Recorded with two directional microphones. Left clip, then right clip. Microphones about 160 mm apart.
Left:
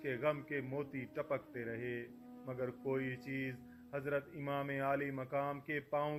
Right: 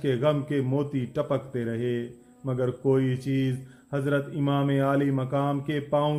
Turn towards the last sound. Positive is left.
turn(degrees=25)  # may be behind; listen again after turning